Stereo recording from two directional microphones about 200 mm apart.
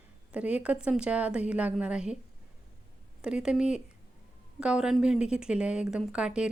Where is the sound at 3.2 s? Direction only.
5° right (ahead or behind).